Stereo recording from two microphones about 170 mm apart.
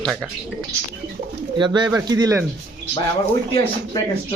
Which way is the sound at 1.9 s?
20° right (ahead or behind).